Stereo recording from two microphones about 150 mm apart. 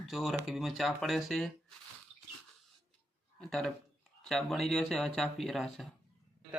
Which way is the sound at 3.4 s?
5° left (ahead or behind).